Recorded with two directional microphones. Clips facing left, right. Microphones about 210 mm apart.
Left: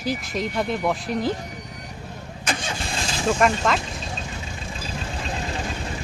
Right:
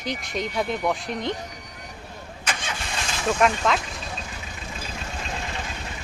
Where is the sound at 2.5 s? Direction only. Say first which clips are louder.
Left 3 dB; 30° left (ahead or behind).